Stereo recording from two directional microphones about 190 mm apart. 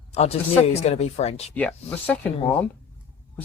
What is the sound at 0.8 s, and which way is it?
Speech, 35° left (ahead or behind).